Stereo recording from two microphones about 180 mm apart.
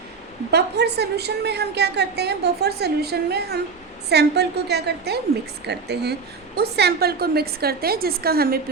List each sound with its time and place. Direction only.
0.5 s a woman's voice: 65° right (ahead or behind)